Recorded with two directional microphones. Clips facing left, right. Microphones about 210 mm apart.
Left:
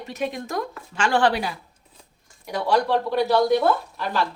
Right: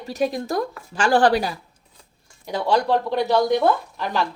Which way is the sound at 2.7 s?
20° right (ahead or behind).